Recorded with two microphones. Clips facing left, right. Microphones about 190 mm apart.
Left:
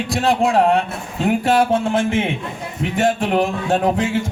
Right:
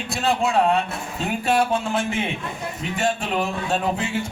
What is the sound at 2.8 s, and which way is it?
Speech, 65° left (ahead or behind).